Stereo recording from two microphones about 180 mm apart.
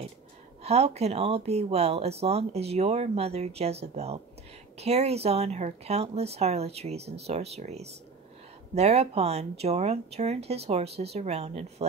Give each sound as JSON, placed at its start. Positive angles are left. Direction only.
{"t": 0.7, "sound": "speech", "side_deg": -35}